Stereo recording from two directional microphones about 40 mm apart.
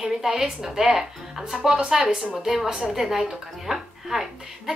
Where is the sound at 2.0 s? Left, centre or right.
Right.